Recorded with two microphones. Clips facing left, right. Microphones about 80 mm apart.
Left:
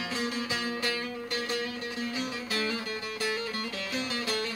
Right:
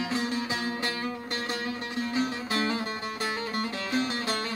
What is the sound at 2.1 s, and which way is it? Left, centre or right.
Music, right.